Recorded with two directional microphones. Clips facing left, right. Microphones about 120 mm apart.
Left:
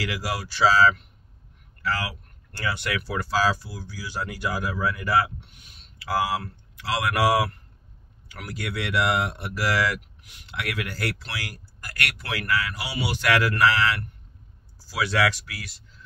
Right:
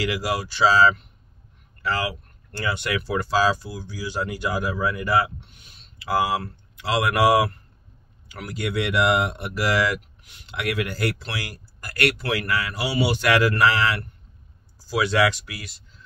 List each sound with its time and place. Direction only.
0.0 s speech: 20° right (ahead or behind)